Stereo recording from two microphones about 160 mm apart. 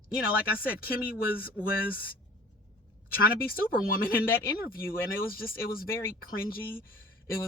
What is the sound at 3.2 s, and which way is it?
A woman's voice, 65° left (ahead or behind).